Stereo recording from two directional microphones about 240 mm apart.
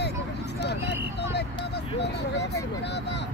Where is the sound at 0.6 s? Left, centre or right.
Left.